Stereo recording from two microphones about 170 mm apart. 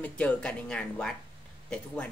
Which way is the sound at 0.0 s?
5° left (ahead or behind).